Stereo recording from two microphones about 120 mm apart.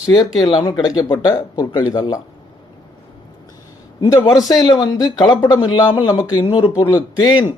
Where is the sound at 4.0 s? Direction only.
35° left (ahead or behind).